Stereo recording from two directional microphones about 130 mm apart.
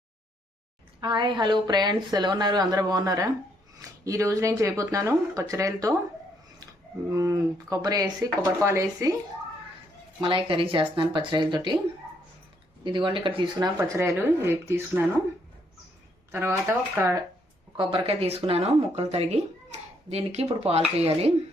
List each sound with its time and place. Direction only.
1.0 s a woman's voice: 35° right (ahead or behind)
7.1 s speech: 25° right (ahead or behind)
10.2 s a woman's voice: 40° right (ahead or behind)
12.8 s a woman's voice: 40° right (ahead or behind)
13.7 s speech: 20° right (ahead or behind)
16.3 s speech: 20° right (ahead or behind)
17.7 s speech: 45° right (ahead or behind)